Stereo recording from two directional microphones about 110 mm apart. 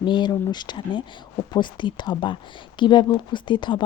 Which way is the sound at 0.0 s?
45° left (ahead or behind).